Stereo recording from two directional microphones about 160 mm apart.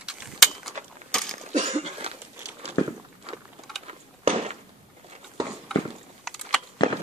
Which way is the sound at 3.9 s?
40° right (ahead or behind).